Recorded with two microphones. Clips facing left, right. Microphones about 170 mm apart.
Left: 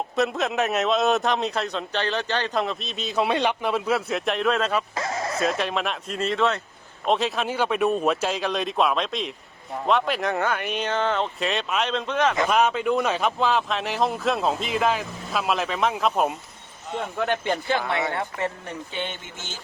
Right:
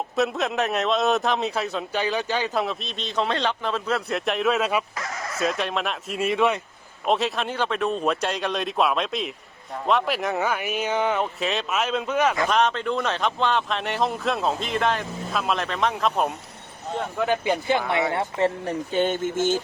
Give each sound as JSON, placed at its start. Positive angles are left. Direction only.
{"t": 0.2, "sound": "a man's voice", "side_deg": 0}
{"t": 4.9, "sound": "a sound", "side_deg": 30}
{"t": 5.4, "sound": "a man's voice", "side_deg": 0}
{"t": 7.0, "sound": "a man's voice", "side_deg": 0}
{"t": 12.5, "sound": "a man's voice", "side_deg": 10}
{"t": 18.9, "sound": "speech", "side_deg": -45}